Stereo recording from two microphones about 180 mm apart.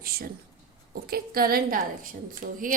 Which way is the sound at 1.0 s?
55° right (ahead or behind).